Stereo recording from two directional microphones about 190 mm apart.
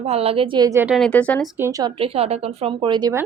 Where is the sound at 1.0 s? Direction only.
5° left (ahead or behind).